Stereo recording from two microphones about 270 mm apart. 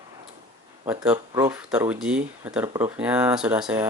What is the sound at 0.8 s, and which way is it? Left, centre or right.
Speech, centre.